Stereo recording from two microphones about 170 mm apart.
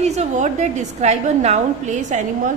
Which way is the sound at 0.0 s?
40° right (ahead or behind).